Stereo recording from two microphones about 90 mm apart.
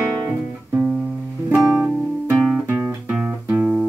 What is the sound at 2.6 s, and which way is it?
Music, 25° right (ahead or behind).